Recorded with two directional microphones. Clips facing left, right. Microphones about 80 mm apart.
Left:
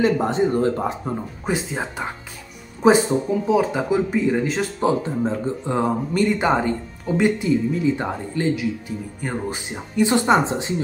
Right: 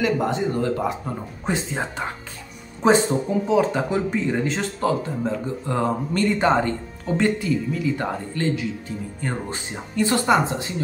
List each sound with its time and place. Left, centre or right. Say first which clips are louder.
0.0 s speech: left 3 dB; left
1.4 s speech: even; centre
4.8 s speech: left 2 dB; left
5.7 s speech: left 1 dB; centre
8.5 s speech: left 2 dB; centre; by 10.7 s left